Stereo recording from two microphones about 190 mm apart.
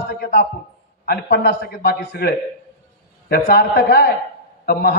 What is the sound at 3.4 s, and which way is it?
A man's voice, 55° left (ahead or behind).